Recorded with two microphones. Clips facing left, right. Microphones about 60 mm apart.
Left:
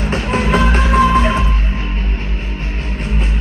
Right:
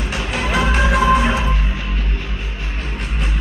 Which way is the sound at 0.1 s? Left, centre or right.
Left.